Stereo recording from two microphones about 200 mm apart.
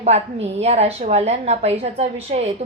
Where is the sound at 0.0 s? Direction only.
30° right (ahead or behind).